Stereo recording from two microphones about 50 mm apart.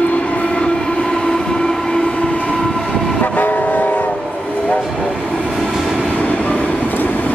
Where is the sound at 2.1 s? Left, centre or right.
Left.